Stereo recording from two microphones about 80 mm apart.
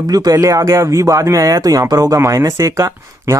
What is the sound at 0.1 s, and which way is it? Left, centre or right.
Speech, right.